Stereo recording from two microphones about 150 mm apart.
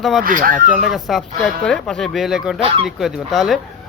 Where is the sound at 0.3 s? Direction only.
65° right (ahead or behind).